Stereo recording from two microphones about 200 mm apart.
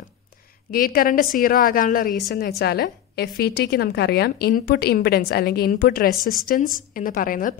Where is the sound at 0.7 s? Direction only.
45° left (ahead or behind).